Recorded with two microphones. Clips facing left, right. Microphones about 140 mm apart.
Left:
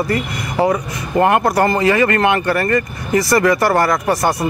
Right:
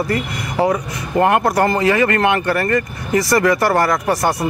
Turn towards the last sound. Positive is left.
turn(degrees=20)  # may be behind; listen again after turning